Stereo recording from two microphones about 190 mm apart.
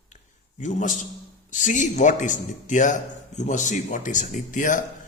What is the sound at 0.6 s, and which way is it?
A man's voice, 40° left (ahead or behind).